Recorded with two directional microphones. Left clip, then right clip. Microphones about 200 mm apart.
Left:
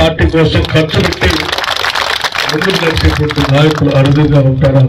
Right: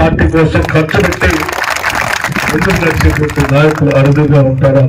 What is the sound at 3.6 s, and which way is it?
A man's voice, 45° right (ahead or behind).